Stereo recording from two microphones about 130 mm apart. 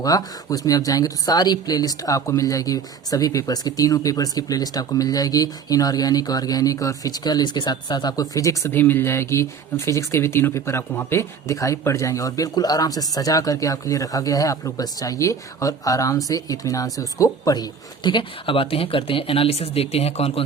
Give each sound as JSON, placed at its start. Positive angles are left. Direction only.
{"t": 0.0, "sound": "speech", "side_deg": 30}